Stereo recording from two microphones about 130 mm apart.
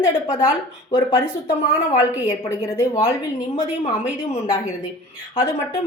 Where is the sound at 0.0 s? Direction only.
30° left (ahead or behind).